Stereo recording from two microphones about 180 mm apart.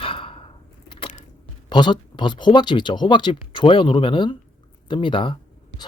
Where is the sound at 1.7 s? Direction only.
25° left (ahead or behind).